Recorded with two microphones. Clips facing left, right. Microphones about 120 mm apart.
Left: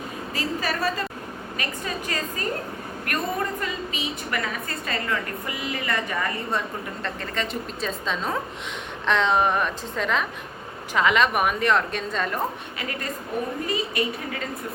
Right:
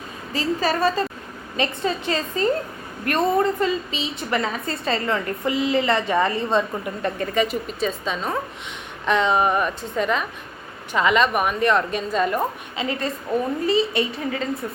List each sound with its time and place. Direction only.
0.3 s a woman's voice: 25° right (ahead or behind)
3.6 s a woman's voice: 25° right (ahead or behind)
7.0 s a woman's voice: 10° right (ahead or behind)
12.7 s a woman's voice: 20° right (ahead or behind)